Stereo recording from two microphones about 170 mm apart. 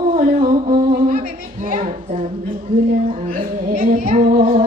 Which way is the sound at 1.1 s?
55° right (ahead or behind).